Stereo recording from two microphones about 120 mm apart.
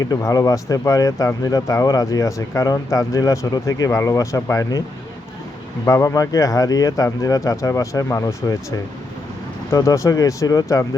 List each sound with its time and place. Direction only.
0.0 s speech: 30° left (ahead or behind)
5.8 s speech: 25° left (ahead or behind)
9.7 s speech: 25° left (ahead or behind)